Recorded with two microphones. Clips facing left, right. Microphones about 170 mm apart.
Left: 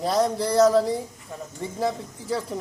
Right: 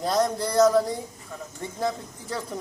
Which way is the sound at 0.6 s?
30° left (ahead or behind).